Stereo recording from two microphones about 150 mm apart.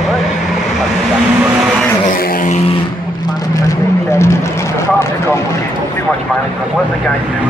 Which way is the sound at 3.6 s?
20° left (ahead or behind).